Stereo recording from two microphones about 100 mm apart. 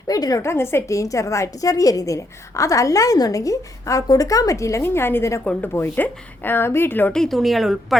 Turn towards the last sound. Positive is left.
turn(degrees=0)  # may be behind; listen again after turning